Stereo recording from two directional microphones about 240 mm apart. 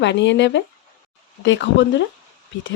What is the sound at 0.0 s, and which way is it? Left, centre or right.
Speech, left.